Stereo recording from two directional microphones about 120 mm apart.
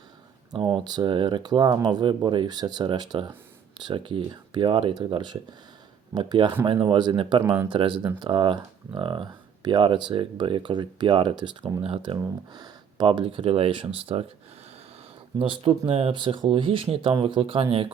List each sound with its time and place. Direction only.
0.5 s speech: 5° left (ahead or behind)
0.9 s speech: 40° right (ahead or behind)
12.1 s speech: 35° right (ahead or behind)
13.1 s speech: 45° right (ahead or behind)
15.4 s speech: 50° right (ahead or behind)